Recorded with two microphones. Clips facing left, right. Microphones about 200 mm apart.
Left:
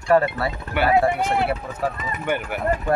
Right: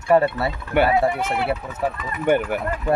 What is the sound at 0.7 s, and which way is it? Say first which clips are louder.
Speech: right 5 dB; 50° right (ahead or behind).